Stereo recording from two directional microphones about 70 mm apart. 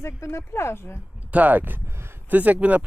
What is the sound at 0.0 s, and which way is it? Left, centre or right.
Speech, left.